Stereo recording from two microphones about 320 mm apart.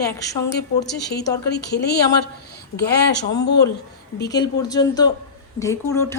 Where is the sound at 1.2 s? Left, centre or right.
Centre.